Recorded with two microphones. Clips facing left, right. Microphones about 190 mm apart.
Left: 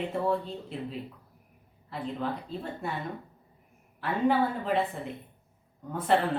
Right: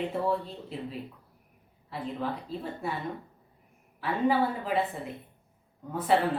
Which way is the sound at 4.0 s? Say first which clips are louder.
Even; centre (ahead or behind).